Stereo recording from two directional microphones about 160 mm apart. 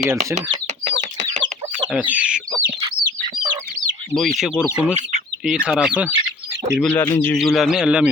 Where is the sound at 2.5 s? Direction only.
25° right (ahead or behind).